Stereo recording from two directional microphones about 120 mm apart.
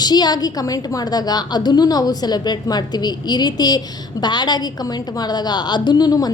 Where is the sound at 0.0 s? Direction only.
35° left (ahead or behind).